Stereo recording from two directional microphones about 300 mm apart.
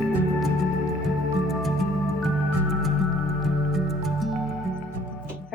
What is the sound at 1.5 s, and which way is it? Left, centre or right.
Music, centre.